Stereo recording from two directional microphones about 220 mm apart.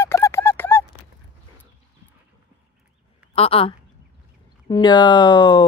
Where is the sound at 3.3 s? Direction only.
25° left (ahead or behind).